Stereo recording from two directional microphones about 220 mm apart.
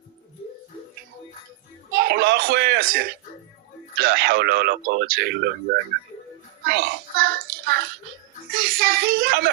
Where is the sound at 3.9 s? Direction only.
45° right (ahead or behind).